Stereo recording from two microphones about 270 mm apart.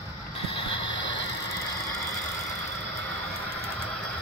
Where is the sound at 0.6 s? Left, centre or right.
Centre.